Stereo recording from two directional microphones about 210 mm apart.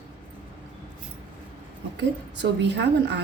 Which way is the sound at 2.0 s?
55° right (ahead or behind).